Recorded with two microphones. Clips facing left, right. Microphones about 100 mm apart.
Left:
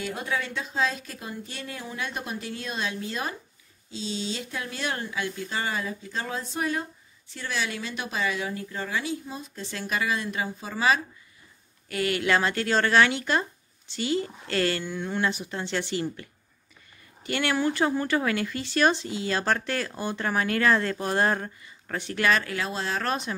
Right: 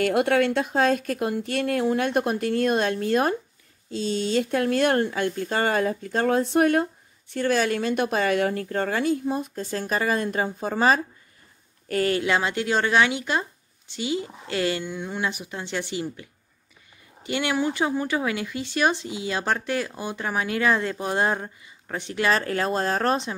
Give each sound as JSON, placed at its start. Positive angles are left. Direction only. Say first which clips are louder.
{"t": 0.0, "sound": "a woman's voice", "louder": "right 11 dB", "side_deg": -70}
{"t": 12.2, "sound": "speech", "louder": "right 1 dB", "side_deg": -15}
{"t": 22.3, "sound": "speech", "louder": "right 6 dB", "side_deg": -40}